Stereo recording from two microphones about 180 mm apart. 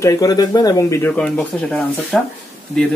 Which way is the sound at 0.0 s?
20° left (ahead or behind).